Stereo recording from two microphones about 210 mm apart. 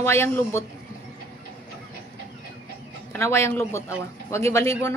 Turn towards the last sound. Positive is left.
turn(degrees=15)  # may be behind; listen again after turning